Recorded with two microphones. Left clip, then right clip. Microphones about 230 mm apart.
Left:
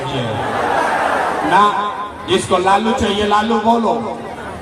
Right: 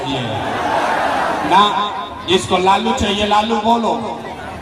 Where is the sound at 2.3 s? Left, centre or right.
Right.